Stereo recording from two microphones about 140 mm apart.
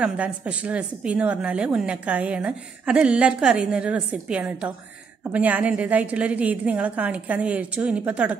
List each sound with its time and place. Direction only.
0.0 s a woman's voice: 10° right (ahead or behind)